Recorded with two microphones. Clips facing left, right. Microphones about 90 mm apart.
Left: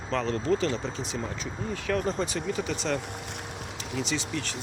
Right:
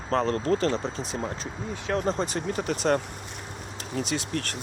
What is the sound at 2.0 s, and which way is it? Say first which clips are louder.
Speech: right 2 dB; 35° right (ahead or behind).